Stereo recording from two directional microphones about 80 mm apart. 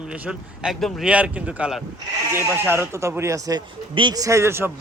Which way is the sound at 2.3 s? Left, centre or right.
Right.